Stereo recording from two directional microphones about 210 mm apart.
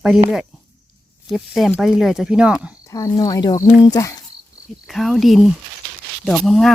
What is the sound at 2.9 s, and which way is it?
Speech, 15° left (ahead or behind).